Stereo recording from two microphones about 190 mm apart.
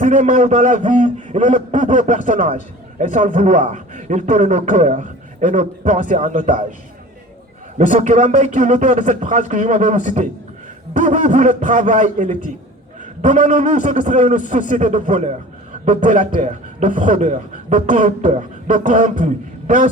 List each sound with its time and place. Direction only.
0.0 s a man's voice: 40° right (ahead or behind)
7.8 s a man's voice: 40° right (ahead or behind)